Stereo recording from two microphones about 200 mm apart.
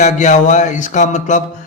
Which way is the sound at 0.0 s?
35° left (ahead or behind).